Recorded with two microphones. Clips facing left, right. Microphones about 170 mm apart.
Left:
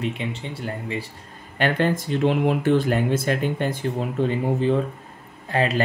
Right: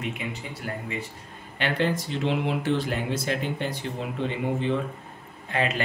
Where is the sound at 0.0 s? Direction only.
30° left (ahead or behind).